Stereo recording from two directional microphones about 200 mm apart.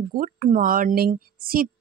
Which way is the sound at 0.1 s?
45° right (ahead or behind).